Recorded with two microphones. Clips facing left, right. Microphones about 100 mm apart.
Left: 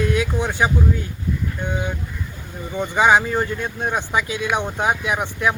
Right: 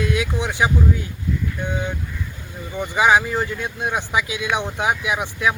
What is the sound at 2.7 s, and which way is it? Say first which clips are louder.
Speech: left 2 dB; 20° left (ahead or behind).